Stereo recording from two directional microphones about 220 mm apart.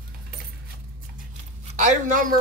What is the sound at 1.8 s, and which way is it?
Speech, 35° right (ahead or behind).